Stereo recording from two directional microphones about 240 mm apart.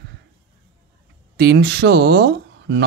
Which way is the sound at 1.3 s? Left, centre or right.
Right.